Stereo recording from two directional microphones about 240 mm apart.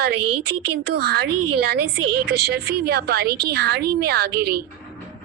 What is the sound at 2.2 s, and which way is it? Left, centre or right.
Speech, right.